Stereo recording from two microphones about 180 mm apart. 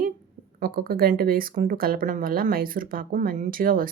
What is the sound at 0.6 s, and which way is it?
Speech, 55° right (ahead or behind).